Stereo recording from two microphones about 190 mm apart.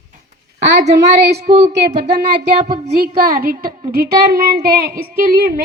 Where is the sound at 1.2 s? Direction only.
60° right (ahead or behind).